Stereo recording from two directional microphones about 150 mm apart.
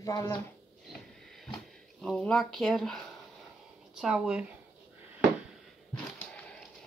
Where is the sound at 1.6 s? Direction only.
5° left (ahead or behind).